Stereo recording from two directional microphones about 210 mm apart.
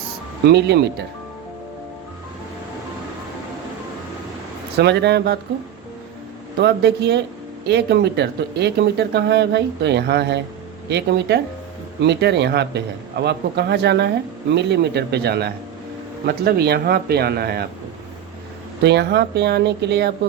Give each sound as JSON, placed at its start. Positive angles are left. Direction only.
{"t": 0.4, "sound": "speech", "side_deg": -50}
{"t": 4.8, "sound": "speech", "side_deg": -55}
{"t": 6.6, "sound": "speech", "side_deg": -50}
{"t": 18.8, "sound": "speech", "side_deg": -55}